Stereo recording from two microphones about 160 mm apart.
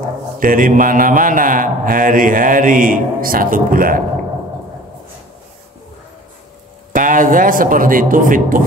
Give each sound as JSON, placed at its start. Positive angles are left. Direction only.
{"t": 0.4, "sound": "speech", "side_deg": -60}
{"t": 6.9, "sound": "speech", "side_deg": -55}